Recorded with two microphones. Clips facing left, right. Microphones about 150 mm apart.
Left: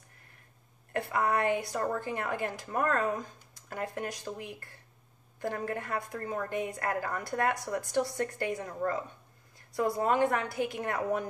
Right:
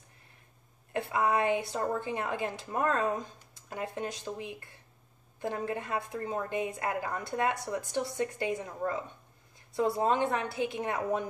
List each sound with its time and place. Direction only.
0.9 s speech: 20° right (ahead or behind)